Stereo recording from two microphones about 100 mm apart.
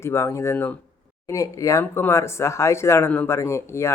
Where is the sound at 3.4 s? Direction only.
30° left (ahead or behind).